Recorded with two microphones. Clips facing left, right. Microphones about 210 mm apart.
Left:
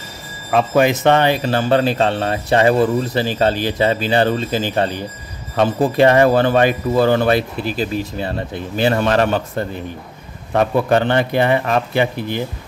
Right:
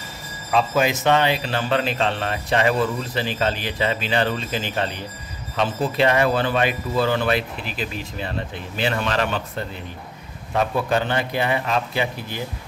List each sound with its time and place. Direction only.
0.5 s speech: 55° left (ahead or behind); by 4.9 s 40° left (ahead or behind)
5.6 s speech: 50° left (ahead or behind)
10.5 s speech: 60° left (ahead or behind)